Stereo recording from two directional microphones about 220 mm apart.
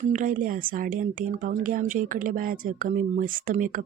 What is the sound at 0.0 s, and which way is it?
Speech, 35° right (ahead or behind).